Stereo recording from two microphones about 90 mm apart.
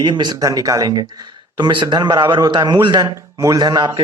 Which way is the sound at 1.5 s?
55° right (ahead or behind).